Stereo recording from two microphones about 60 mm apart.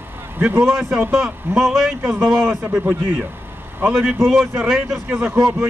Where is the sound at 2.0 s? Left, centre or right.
Right.